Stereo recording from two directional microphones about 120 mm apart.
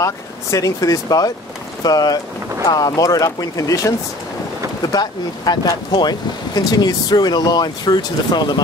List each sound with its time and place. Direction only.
0.0 s speech: 25° left (ahead or behind)